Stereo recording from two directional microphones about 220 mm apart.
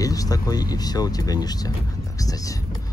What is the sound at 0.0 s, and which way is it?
Speech, 15° left (ahead or behind).